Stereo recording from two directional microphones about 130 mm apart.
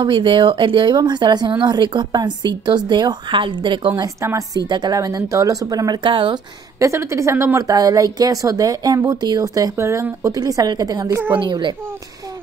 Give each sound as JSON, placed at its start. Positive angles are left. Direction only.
{"t": 0.0, "sound": "speech", "side_deg": -40}
{"t": 4.2, "sound": "a woman's voice", "side_deg": -20}
{"t": 4.6, "sound": "a woman's voice", "side_deg": -35}
{"t": 6.8, "sound": "a woman's voice", "side_deg": -20}
{"t": 11.3, "sound": "speech", "side_deg": -35}